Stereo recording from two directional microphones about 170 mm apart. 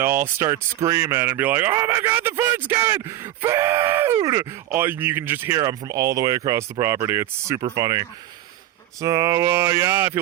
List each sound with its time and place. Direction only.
0.0 s speech: 15° right (ahead or behind)